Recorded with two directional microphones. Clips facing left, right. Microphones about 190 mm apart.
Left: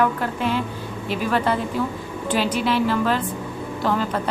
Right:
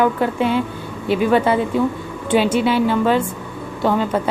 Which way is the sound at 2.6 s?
Centre (ahead or behind).